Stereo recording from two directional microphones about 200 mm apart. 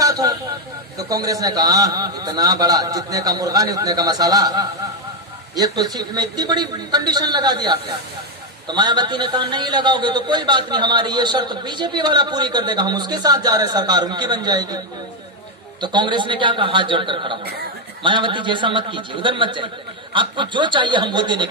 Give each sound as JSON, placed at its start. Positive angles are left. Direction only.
{"t": 0.0, "sound": "vehicle", "side_deg": -15}
{"t": 0.9, "sound": "a man's voice", "side_deg": -15}
{"t": 15.8, "sound": "a man's voice", "side_deg": -20}